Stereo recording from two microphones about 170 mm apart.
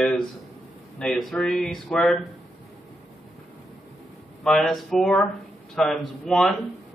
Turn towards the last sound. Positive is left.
turn(degrees=0)  # may be behind; listen again after turning